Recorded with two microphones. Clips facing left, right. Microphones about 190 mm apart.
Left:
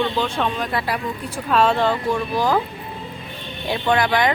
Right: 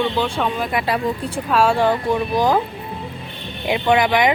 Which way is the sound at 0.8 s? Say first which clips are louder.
Right 5 dB; 25° right (ahead or behind).